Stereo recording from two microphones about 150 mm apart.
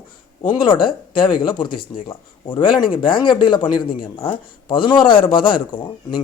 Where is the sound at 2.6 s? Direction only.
30° left (ahead or behind).